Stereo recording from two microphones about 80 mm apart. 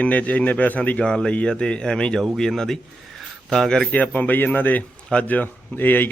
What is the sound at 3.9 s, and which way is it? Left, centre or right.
Speech, centre.